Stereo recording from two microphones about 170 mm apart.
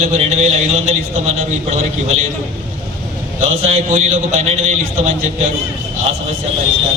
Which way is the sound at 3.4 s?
40° right (ahead or behind).